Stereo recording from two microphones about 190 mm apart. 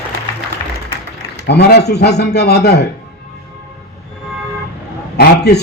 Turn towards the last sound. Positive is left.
turn(degrees=60)  # may be behind; listen again after turning